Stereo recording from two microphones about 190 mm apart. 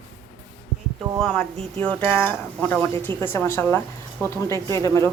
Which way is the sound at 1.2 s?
5° left (ahead or behind).